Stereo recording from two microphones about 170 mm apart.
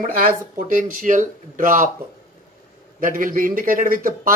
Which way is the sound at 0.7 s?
50° right (ahead or behind).